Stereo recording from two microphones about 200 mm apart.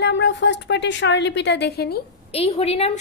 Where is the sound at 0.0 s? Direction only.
60° left (ahead or behind).